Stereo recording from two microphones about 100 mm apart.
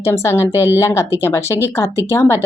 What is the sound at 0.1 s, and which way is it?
Speech, 25° left (ahead or behind).